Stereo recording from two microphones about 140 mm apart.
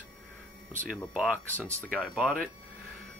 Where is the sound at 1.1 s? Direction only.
Centre (ahead or behind).